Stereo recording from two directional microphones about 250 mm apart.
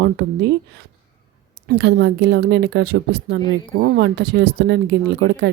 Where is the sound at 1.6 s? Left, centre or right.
Right.